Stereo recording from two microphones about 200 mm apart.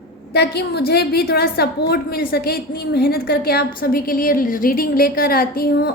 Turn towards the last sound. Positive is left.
turn(degrees=50)  # may be behind; listen again after turning